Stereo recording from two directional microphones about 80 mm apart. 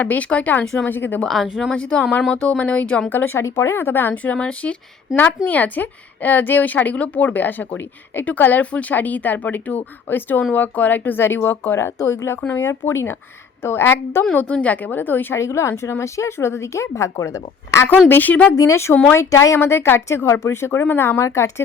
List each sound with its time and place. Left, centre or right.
0.0 s a woman's voice: centre
0.6 s speech: centre
0.9 s a woman's voice: left
1.2 s a woman's voice: centre
1.7 s speech: centre
3.1 s a woman's voice: left
12.4 s a woman's voice: left
12.9 s speech: left
14.3 s a woman's voice: centre
15.4 s speech: left
18.1 s a woman's voice: left
18.5 s speech: left